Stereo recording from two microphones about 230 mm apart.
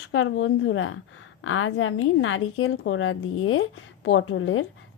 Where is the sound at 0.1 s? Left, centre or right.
Left.